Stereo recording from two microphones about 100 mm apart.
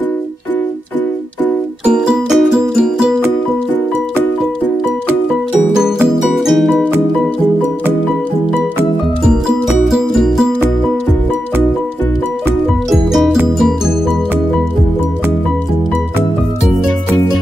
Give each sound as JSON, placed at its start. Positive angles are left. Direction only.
{"t": 1.9, "sound": "music", "side_deg": -5}
{"t": 5.8, "sound": "music", "side_deg": -5}
{"t": 9.7, "sound": "music", "side_deg": -5}
{"t": 12.9, "sound": "music", "side_deg": -5}